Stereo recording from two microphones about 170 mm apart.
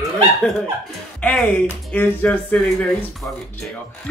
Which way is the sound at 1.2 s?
5° left (ahead or behind).